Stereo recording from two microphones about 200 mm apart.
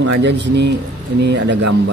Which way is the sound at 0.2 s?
60° right (ahead or behind).